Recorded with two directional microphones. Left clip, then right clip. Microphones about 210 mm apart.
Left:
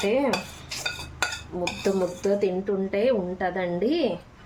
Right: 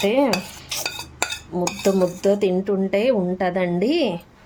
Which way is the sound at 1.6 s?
45° right (ahead or behind).